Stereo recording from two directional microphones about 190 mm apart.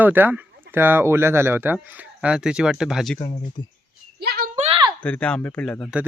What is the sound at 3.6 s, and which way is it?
Speech, 25° left (ahead or behind).